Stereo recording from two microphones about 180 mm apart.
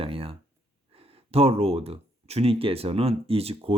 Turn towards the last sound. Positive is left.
turn(degrees=-35)  # may be behind; listen again after turning